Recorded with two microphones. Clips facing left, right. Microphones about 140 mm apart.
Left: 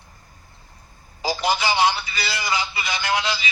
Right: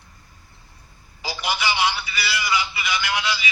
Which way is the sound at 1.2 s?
45° left (ahead or behind).